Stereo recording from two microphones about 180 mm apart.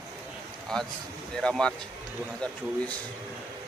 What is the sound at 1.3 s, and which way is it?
Speech, 5° left (ahead or behind).